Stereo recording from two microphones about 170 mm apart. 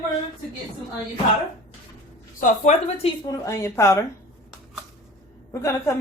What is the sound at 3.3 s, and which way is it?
Speech, 20° left (ahead or behind).